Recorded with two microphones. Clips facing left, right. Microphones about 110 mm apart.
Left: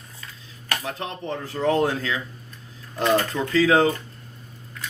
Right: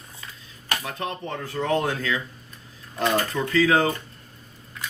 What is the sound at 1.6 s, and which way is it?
Speech, 25° left (ahead or behind).